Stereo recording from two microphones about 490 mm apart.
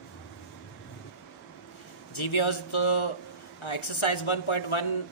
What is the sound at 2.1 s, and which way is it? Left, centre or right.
A man's voice, left.